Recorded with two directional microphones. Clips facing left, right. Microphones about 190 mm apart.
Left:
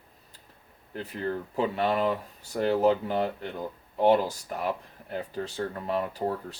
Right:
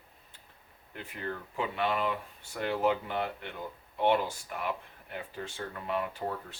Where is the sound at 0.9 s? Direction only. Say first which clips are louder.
Left 7 dB; 35° left (ahead or behind).